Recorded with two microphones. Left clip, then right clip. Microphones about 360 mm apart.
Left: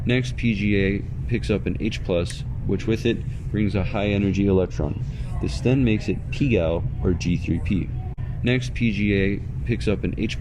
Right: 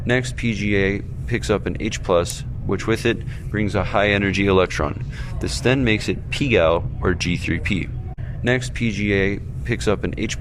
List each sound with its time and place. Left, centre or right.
0.1 s speech: right
4.8 s speech: right
5.4 s speech: right